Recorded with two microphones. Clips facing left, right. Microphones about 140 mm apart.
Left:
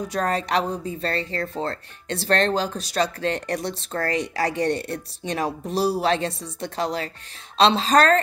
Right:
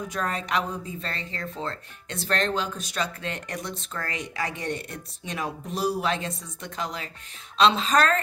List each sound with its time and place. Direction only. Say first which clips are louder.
0.1 s speech: left 5 dB; 35° left (ahead or behind)